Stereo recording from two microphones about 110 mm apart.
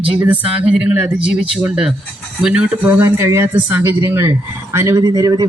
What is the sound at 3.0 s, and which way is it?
A man's voice, 20° right (ahead or behind).